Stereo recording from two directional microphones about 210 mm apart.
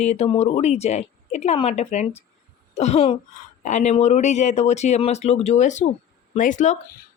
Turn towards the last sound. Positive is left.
turn(degrees=35)  # may be behind; listen again after turning